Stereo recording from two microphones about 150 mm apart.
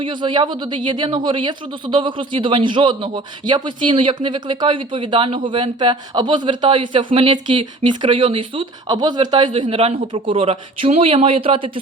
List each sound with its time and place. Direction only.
0.0 s speech: 30° right (ahead or behind)